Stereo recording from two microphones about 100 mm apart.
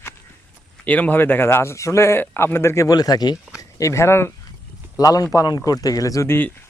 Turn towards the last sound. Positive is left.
turn(degrees=25)  # may be behind; listen again after turning